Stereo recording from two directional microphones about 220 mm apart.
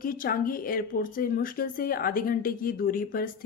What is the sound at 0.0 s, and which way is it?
A woman's voice, 40° left (ahead or behind).